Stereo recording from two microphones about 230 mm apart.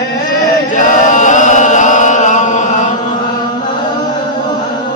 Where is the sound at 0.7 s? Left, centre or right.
Left.